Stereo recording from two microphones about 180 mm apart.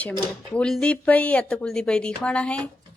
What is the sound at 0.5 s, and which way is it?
A woman's voice, 5° left (ahead or behind).